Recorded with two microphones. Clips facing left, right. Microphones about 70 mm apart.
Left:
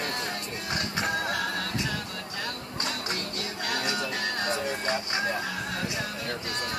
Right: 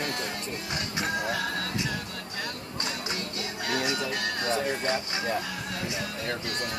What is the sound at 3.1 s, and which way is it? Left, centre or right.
Music, left.